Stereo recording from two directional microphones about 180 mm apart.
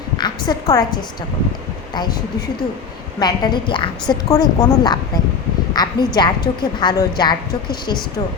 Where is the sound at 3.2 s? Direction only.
25° left (ahead or behind).